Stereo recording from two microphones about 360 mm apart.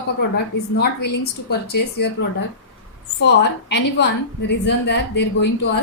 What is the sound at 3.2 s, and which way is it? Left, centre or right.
A woman's voice, left.